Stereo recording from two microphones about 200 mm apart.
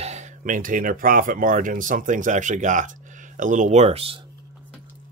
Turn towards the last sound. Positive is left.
turn(degrees=-30)  # may be behind; listen again after turning